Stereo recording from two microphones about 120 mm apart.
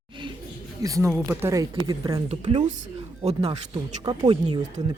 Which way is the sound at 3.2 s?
65° right (ahead or behind).